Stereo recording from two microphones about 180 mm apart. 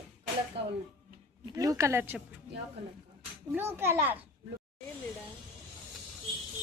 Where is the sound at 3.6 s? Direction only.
10° right (ahead or behind).